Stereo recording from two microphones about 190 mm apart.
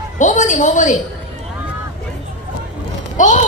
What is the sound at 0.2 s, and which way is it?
Speech, 40° left (ahead or behind).